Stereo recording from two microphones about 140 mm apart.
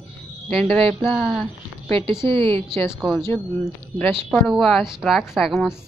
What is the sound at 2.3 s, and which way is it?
Speech, 40° right (ahead or behind).